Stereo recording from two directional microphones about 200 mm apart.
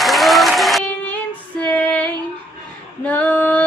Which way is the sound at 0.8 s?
10° left (ahead or behind).